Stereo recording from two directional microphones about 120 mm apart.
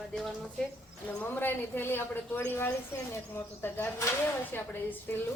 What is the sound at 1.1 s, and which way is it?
A woman's voice, 15° left (ahead or behind).